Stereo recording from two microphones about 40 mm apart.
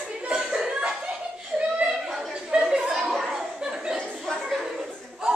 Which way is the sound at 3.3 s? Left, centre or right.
Centre.